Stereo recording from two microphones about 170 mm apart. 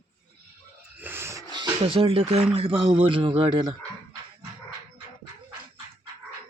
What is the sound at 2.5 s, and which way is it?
Speech, 30° right (ahead or behind).